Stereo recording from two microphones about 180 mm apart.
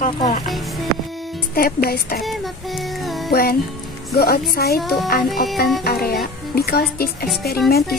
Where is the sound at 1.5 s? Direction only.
55° left (ahead or behind).